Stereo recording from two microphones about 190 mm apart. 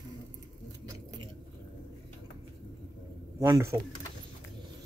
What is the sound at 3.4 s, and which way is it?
Speech, 15° right (ahead or behind).